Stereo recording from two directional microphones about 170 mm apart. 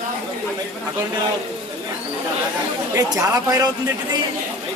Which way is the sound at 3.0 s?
20° right (ahead or behind).